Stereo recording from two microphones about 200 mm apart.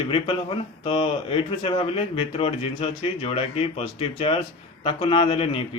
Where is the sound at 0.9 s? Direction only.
25° left (ahead or behind).